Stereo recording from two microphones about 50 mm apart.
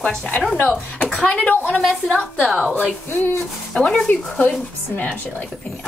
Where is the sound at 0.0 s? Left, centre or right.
Left.